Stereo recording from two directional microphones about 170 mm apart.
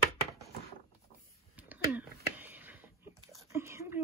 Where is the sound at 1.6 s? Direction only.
10° right (ahead or behind).